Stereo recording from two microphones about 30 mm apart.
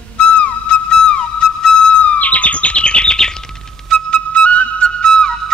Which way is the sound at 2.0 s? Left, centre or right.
Left.